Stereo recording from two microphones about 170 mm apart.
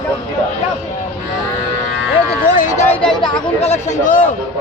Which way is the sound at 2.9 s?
5° left (ahead or behind).